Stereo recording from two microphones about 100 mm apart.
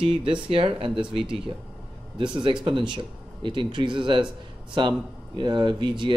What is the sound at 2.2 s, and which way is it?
Speech, 55° right (ahead or behind).